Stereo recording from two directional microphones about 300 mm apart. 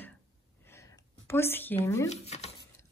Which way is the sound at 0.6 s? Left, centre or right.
Centre.